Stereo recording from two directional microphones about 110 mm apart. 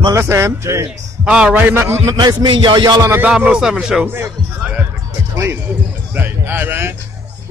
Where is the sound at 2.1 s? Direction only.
45° right (ahead or behind).